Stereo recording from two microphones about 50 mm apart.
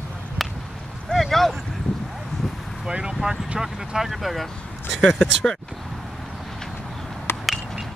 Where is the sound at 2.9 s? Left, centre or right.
Centre.